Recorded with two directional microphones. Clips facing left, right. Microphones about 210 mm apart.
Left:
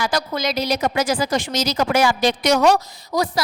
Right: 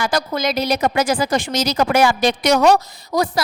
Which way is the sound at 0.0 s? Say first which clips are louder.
Right 2 dB; 55° right (ahead or behind).